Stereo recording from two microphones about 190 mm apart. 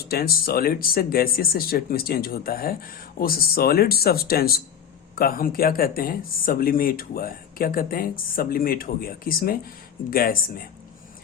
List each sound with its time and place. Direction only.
0.1 s speech: 50° left (ahead or behind)